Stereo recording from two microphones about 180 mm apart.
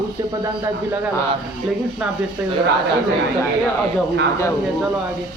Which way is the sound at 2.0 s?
5° right (ahead or behind).